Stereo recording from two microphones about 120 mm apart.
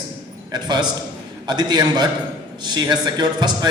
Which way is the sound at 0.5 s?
35° right (ahead or behind).